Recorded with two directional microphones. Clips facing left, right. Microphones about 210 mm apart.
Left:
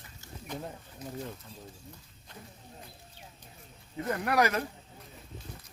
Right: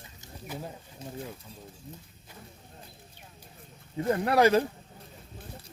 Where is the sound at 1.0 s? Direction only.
25° right (ahead or behind).